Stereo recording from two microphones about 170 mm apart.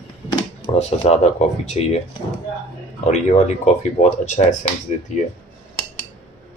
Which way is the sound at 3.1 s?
40° left (ahead or behind).